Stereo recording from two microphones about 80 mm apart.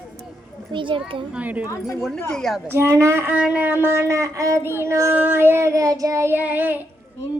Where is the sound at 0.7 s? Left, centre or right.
Right.